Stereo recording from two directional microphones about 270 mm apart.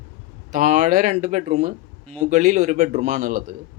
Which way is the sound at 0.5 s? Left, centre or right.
Right.